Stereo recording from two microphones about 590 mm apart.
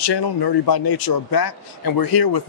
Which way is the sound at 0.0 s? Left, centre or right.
Left.